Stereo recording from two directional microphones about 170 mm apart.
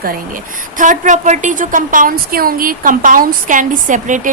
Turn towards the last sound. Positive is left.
turn(degrees=-50)  # may be behind; listen again after turning